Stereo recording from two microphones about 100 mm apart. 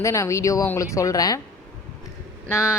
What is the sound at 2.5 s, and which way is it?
Speech, 25° left (ahead or behind).